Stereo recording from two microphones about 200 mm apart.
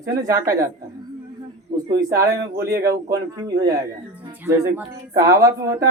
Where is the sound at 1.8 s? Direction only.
15° right (ahead or behind).